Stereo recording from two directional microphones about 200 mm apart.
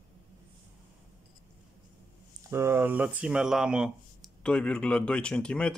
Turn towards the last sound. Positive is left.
turn(degrees=5)  # may be behind; listen again after turning